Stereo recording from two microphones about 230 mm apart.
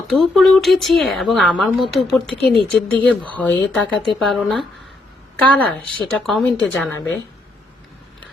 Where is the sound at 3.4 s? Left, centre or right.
Centre.